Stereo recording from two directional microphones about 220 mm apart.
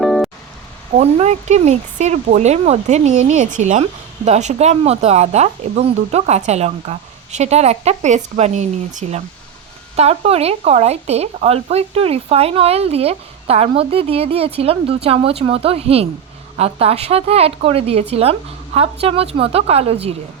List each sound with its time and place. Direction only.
0.0 s music: centre (ahead or behind)
0.9 s speech: 30° right (ahead or behind)